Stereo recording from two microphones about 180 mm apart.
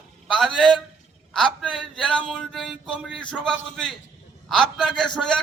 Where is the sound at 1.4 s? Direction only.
Centre (ahead or behind).